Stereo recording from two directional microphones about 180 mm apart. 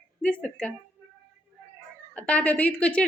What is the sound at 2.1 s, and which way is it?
Speech, 5° left (ahead or behind).